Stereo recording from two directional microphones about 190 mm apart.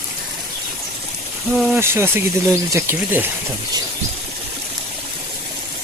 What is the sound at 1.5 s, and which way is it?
Speech, 10° right (ahead or behind).